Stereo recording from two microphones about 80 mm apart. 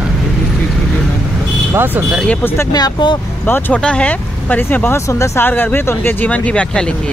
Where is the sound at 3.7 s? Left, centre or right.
Centre; by 5.5 s left.